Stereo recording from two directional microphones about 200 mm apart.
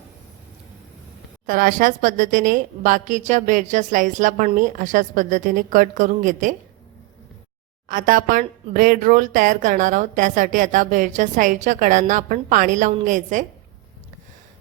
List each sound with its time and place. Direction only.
1.5 s speech: 45° right (ahead or behind)
7.9 s speech: 45° right (ahead or behind)